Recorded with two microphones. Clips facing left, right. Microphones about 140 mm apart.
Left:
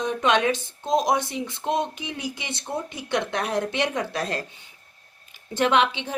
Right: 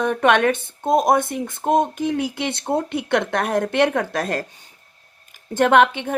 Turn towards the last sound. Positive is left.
turn(degrees=-55)  # may be behind; listen again after turning